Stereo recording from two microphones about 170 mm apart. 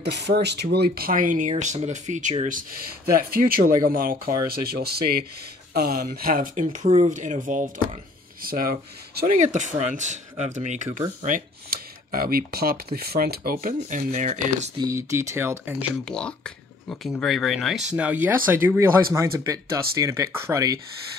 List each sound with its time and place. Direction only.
0.0 s speech: 80° right; by 2.3 s 45° right (ahead or behind)
3.1 s speech: 60° right (ahead or behind)
4.5 s speech: 65° right (ahead or behind); by 14.7 s 45° right (ahead or behind)
14.8 s speech: 15° right (ahead or behind)
16.1 s speech: 5° left (ahead or behind); by 20.8 s 20° right (ahead or behind)